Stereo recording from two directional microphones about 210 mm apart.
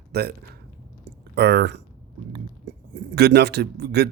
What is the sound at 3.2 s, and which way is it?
Speech, 50° right (ahead or behind).